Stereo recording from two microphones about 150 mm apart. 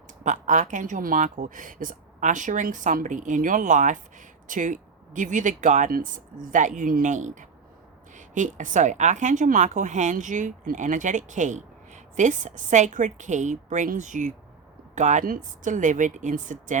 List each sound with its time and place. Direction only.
0.3 s speech: 55° right (ahead or behind)